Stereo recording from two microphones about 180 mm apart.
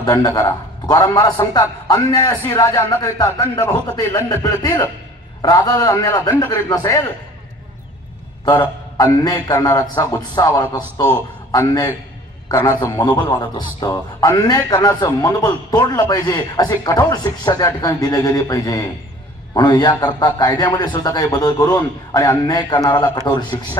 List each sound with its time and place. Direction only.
0.0 s a man's voice: 20° left (ahead or behind)
8.9 s a man's voice: 20° left (ahead or behind)